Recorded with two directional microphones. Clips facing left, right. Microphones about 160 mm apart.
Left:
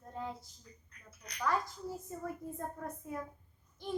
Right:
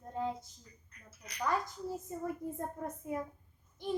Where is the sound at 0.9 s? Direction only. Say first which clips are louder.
Right 2 dB; centre (ahead or behind).